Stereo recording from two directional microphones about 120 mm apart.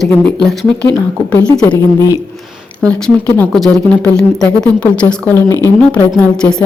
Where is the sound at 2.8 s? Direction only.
10° left (ahead or behind).